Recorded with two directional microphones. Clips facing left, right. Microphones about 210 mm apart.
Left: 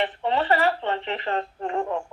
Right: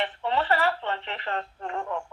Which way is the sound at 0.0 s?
20° left (ahead or behind).